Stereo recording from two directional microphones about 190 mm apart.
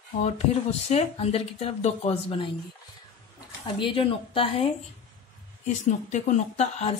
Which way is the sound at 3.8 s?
30° left (ahead or behind).